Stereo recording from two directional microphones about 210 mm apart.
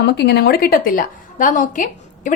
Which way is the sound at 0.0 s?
50° left (ahead or behind).